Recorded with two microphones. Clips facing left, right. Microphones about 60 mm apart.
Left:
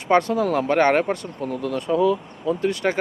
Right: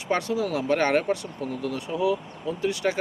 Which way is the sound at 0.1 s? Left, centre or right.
Left.